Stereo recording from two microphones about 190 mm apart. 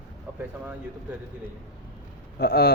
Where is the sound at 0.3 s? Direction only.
10° right (ahead or behind).